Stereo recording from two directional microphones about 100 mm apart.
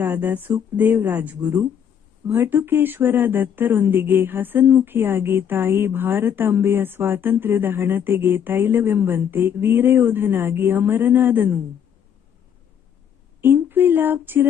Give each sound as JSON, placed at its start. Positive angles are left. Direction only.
{"t": 0.0, "sound": "speech", "side_deg": -20}
{"t": 13.4, "sound": "speech", "side_deg": -20}